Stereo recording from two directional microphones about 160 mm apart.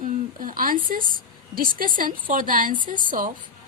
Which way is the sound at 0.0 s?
60° right (ahead or behind).